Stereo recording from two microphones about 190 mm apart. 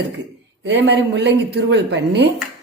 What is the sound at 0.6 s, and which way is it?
Speech, 65° right (ahead or behind).